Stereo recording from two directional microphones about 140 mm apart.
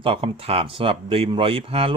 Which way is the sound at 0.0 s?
40° right (ahead or behind).